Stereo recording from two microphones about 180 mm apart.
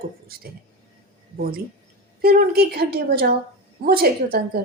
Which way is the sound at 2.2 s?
60° right (ahead or behind).